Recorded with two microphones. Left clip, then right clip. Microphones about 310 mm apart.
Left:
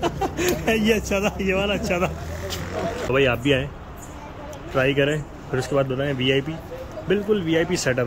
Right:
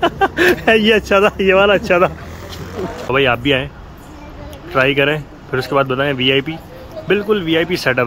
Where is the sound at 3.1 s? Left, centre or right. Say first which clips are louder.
Right 6 dB; centre.